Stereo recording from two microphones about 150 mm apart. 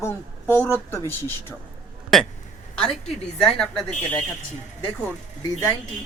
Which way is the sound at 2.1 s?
Centre (ahead or behind).